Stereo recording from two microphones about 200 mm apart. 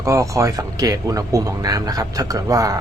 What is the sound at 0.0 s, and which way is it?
Speech, 15° right (ahead or behind).